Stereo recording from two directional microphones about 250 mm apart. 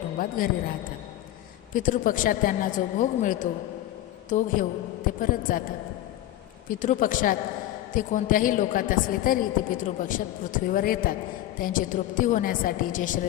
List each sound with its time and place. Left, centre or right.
0.2 s a woman's voice: left
1.7 s a woman's voice: left
6.7 s a woman's voice: left